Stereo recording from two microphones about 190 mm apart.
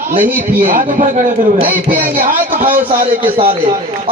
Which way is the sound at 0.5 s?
45° right (ahead or behind).